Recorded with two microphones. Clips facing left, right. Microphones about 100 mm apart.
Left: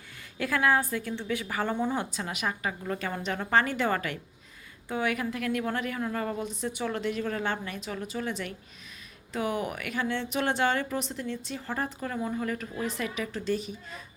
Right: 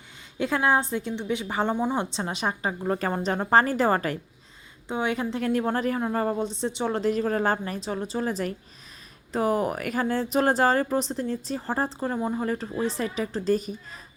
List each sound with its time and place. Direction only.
0.3 s a woman's voice: 25° right (ahead or behind)
4.9 s speech: 25° right (ahead or behind); by 14.0 s 40° right (ahead or behind)